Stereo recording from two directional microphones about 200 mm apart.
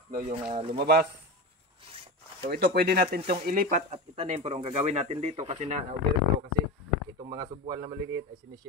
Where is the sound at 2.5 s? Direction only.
50° right (ahead or behind).